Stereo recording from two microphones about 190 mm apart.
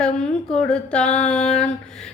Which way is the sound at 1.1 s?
40° left (ahead or behind).